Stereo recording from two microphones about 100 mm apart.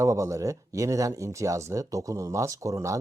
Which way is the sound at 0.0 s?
30° right (ahead or behind).